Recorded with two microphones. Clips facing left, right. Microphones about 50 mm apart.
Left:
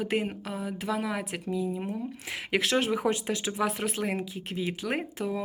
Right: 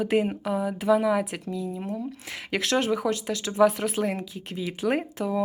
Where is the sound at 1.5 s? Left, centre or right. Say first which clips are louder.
Even; centre.